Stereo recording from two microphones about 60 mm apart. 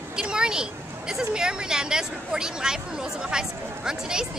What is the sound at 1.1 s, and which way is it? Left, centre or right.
Speech, centre.